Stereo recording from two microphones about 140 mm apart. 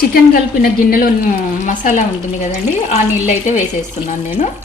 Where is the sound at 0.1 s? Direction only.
90° left; by 3.6 s 55° left (ahead or behind).